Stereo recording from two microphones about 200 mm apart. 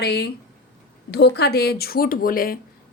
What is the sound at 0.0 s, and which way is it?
Speech, 55° left (ahead or behind).